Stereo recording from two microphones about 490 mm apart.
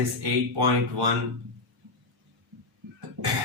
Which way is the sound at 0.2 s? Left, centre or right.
Right.